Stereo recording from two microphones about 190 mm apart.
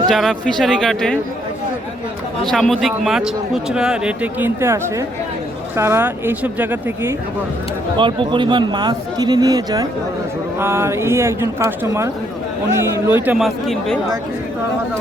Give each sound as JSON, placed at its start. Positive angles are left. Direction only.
{"t": 0.1, "sound": "a man's voice", "side_deg": 0}
{"t": 2.4, "sound": "a man's voice", "side_deg": 0}
{"t": 7.9, "sound": "a man's voice", "side_deg": -25}